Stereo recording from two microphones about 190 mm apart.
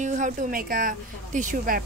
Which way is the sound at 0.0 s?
40° right (ahead or behind).